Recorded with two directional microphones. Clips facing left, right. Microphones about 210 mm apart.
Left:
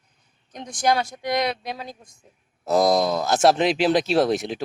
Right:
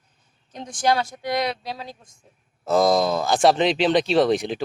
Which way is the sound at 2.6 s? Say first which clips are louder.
Even; centre (ahead or behind).